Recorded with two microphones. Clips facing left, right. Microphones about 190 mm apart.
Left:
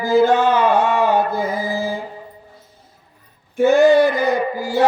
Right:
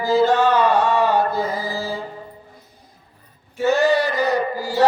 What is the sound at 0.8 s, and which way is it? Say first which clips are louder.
Speech: left 1 dB; 10° left (ahead or behind).